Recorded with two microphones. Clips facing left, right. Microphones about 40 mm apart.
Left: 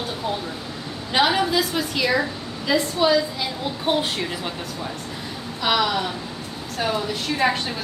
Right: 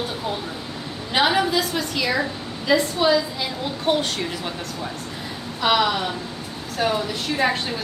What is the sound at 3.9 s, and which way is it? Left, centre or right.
Speech, centre.